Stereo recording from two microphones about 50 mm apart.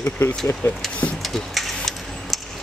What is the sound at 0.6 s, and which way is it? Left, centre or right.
Speech, left.